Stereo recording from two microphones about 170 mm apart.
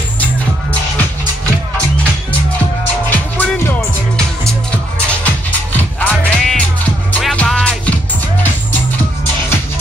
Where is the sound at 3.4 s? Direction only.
5° left (ahead or behind).